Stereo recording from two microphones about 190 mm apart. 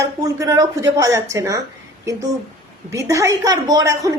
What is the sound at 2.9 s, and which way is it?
A woman's voice, 15° right (ahead or behind).